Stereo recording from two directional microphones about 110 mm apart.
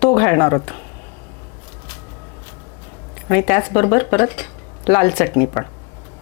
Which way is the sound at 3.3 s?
25° left (ahead or behind).